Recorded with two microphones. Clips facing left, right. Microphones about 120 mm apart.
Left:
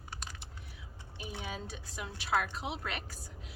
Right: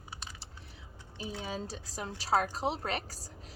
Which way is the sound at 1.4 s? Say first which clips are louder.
Right 3 dB; 35° right (ahead or behind).